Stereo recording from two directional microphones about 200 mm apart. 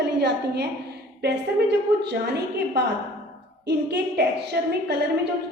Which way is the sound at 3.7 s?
55° right (ahead or behind).